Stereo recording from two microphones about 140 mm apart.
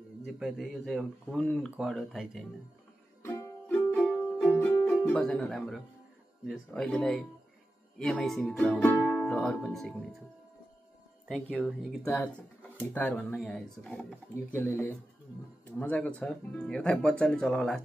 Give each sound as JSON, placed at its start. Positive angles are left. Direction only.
{"t": 0.2, "sound": "speech", "side_deg": 0}
{"t": 3.2, "sound": "music", "side_deg": 20}
{"t": 4.8, "sound": "speech", "side_deg": 5}
{"t": 11.2, "sound": "speech", "side_deg": -5}
{"t": 12.7, "sound": "speech", "side_deg": 10}